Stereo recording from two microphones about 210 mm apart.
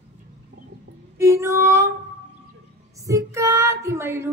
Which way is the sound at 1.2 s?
15° right (ahead or behind).